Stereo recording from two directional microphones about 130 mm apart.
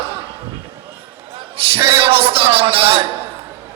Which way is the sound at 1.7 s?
45° right (ahead or behind).